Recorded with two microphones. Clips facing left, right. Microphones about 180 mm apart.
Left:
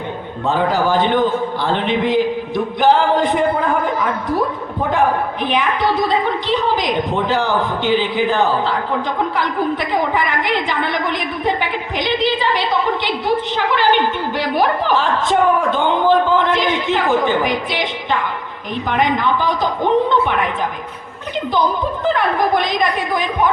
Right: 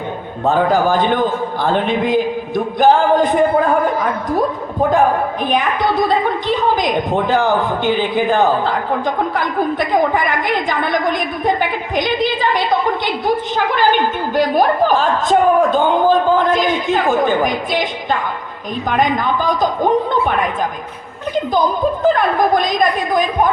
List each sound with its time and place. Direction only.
0.4 s a woman's voice: 45° right (ahead or behind)
4.9 s a woman's voice: 45° right (ahead or behind)
22.0 s a woman's voice: 45° right (ahead or behind)